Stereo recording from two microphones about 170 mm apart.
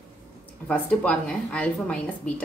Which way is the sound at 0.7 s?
5° left (ahead or behind).